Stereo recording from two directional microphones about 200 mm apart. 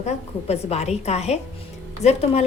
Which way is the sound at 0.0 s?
30° left (ahead or behind).